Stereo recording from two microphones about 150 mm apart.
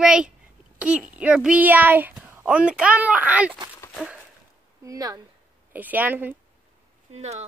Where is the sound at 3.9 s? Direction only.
5° right (ahead or behind).